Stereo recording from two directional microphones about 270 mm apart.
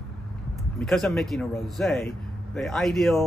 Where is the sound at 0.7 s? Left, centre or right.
Centre.